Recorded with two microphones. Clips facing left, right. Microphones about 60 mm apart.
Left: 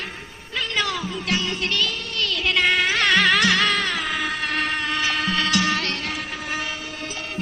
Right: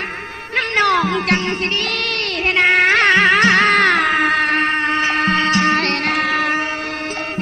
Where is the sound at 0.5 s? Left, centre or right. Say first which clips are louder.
Right 10 dB; right.